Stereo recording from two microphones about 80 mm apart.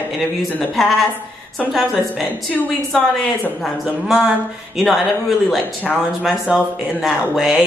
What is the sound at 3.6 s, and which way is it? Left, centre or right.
Speech, centre.